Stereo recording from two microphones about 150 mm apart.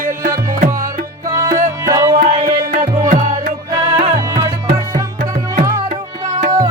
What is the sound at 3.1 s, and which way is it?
Music, 65° right (ahead or behind).